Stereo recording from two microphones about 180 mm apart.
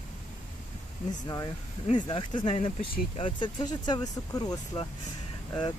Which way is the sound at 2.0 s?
30° left (ahead or behind).